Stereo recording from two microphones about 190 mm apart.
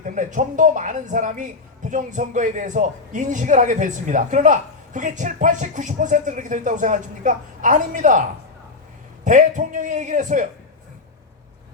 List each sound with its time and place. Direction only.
0.0 s speech: 40° right (ahead or behind)
9.2 s speech: 40° right (ahead or behind)